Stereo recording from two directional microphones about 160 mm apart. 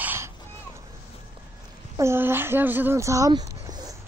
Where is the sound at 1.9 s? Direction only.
15° right (ahead or behind).